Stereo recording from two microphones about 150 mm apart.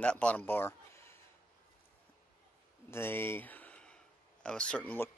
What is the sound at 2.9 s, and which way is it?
Speech, 15° left (ahead or behind).